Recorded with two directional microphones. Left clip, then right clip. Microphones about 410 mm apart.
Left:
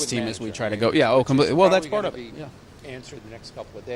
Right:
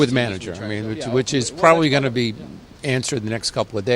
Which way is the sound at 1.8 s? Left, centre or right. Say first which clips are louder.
Right 6 dB; right.